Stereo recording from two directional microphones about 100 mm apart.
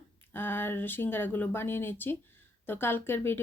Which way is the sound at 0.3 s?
20° left (ahead or behind).